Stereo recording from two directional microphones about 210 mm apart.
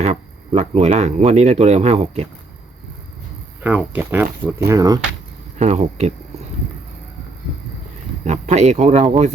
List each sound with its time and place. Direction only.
0.0 s speech: 30° right (ahead or behind)
3.6 s speech: 10° right (ahead or behind)
5.5 s speech: 30° right (ahead or behind)
8.2 s speech: 35° right (ahead or behind)